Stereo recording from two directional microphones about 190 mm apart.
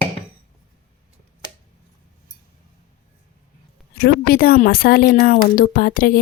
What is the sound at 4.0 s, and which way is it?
Speech, 50° left (ahead or behind).